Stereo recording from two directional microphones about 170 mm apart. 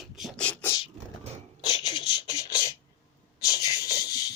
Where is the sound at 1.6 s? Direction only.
25° left (ahead or behind).